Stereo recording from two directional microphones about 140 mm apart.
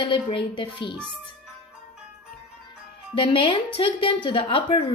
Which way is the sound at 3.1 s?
40° left (ahead or behind).